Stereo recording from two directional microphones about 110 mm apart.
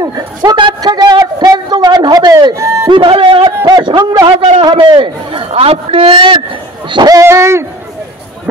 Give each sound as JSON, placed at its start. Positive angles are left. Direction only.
{"t": 0.0, "sound": "a sound", "side_deg": -35}
{"t": 2.9, "sound": "a man's voice", "side_deg": -50}
{"t": 3.6, "sound": "speech", "side_deg": -40}
{"t": 4.6, "sound": "a man's voice", "side_deg": -50}
{"t": 5.5, "sound": "a man's voice", "side_deg": -65}
{"t": 6.9, "sound": "speech", "side_deg": -35}